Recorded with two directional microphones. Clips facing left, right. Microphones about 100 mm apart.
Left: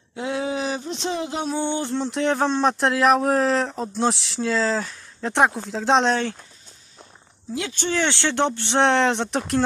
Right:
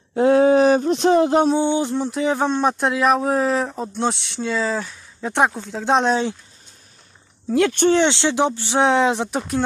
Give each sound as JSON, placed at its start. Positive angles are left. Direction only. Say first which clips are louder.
{"t": 0.1, "sound": "speech", "louder": "right 12 dB", "side_deg": -45}
{"t": 1.6, "sound": "speech", "louder": "right 4 dB", "side_deg": -15}
{"t": 7.5, "sound": "speech", "louder": "right 11 dB", "side_deg": -55}
{"t": 7.9, "sound": "speech", "louder": "right 6 dB", "side_deg": -20}